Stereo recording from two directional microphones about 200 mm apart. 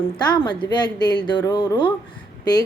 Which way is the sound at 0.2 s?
20° left (ahead or behind).